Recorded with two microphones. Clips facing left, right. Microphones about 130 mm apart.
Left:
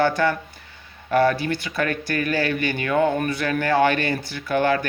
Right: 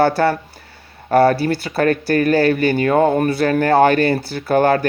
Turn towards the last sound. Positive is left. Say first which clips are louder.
# right 6 dB
turn(degrees=-45)  # may be behind; listen again after turning